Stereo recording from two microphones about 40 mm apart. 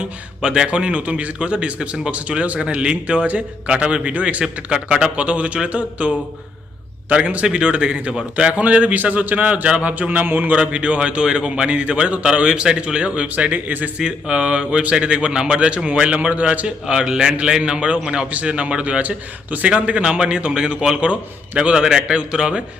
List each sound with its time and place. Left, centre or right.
0.0 s a man's voice: right
4.7 s a man's voice: right
10.5 s a man's voice: right
14.0 s a man's voice: right
16.8 s a man's voice: centre